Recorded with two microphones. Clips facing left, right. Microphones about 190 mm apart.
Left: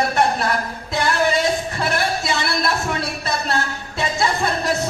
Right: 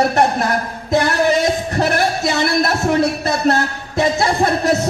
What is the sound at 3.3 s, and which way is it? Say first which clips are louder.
Music: right 7 dB; 45° right (ahead or behind).